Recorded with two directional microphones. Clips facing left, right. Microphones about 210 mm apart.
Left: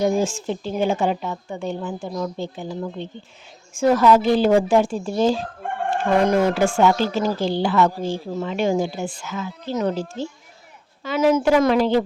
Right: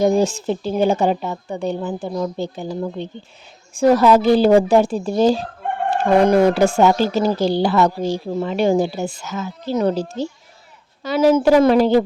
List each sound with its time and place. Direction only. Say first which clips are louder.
0.0 s a woman's voice: right 4 dB; 35° right (ahead or behind)